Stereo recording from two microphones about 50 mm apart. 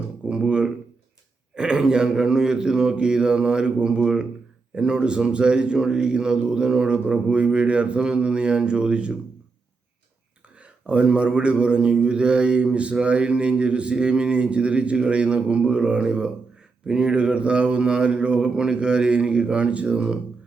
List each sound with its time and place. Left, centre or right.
0.3 s a sound: right
1.5 s a man's voice: centre
4.7 s mantra: centre
10.8 s mantra: right